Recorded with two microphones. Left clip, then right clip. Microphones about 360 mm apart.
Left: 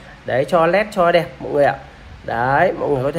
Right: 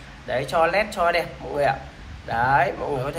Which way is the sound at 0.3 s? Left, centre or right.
Left.